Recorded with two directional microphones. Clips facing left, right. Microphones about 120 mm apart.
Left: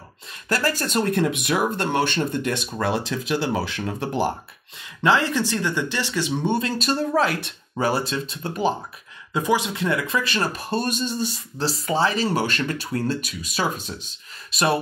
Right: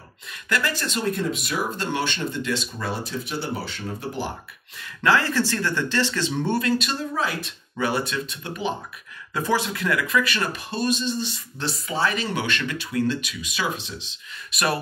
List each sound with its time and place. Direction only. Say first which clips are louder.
0.3 s speech: left 2 dB; 35° left (ahead or behind); by 4.1 s 85° left
4.7 s speech: left 1 dB; 20° left (ahead or behind)
6.6 s speech: even; 40° left (ahead or behind)
7.0 s speech: left 6 dB; 65° left (ahead or behind)
7.7 s speech: left 2 dB; 35° left (ahead or behind)
9.3 s speech: left 2 dB; 15° left (ahead or behind); by 14.1 s 45° left (ahead or behind)
14.5 s speech: left 3 dB; 25° left (ahead or behind)